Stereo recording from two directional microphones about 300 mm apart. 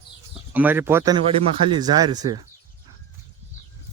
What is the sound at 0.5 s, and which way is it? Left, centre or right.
Speech, centre.